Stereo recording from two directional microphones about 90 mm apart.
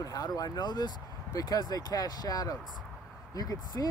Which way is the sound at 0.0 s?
45° left (ahead or behind).